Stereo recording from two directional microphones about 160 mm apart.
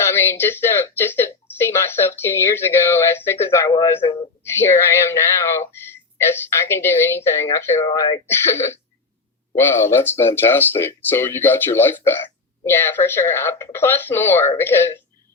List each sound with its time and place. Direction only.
0.0 s speech: 15° left (ahead or behind)